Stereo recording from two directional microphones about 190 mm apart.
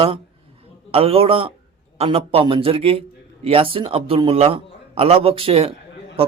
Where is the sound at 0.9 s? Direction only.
30° right (ahead or behind).